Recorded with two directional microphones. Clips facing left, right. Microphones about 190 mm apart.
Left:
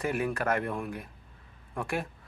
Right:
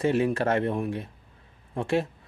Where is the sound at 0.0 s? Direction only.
25° right (ahead or behind).